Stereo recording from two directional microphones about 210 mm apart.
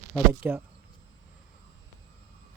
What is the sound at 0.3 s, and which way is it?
Speech, 10° right (ahead or behind).